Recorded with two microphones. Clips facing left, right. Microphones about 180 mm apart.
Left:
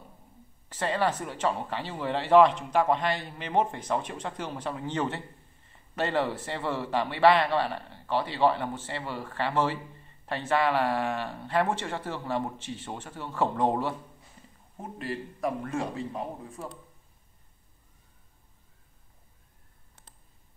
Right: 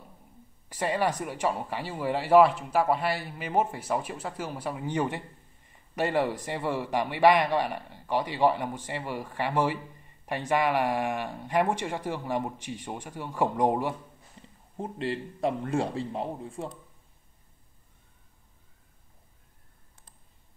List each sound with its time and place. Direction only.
0.7 s a man's voice: 10° right (ahead or behind)
14.8 s a man's voice: 30° right (ahead or behind)